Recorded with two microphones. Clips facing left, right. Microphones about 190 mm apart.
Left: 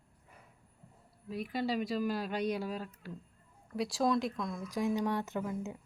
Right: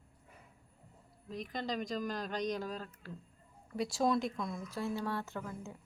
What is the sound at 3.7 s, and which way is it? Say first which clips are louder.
Speech: left 1 dB; centre (ahead or behind).